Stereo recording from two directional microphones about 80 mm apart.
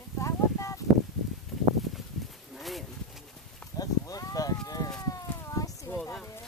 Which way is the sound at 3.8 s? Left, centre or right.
Left.